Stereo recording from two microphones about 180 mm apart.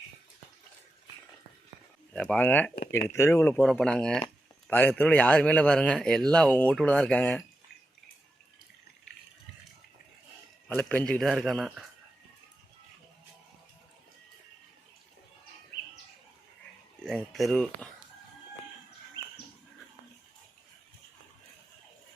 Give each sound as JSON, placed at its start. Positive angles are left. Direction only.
{"t": 2.1, "sound": "a man's voice", "side_deg": 5}
{"t": 3.5, "sound": "a man's voice", "side_deg": 5}
{"t": 10.7, "sound": "a man's voice", "side_deg": 10}
{"t": 17.0, "sound": "a sound", "side_deg": 0}